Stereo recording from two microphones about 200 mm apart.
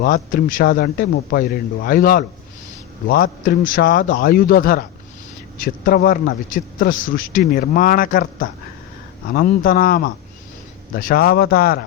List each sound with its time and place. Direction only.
0.0 s a man's voice: 45° left (ahead or behind)